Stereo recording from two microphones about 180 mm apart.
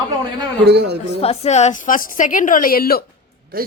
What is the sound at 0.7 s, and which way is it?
Speech, 70° right (ahead or behind).